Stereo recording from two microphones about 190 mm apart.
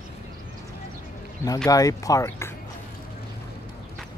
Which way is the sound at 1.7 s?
20° left (ahead or behind).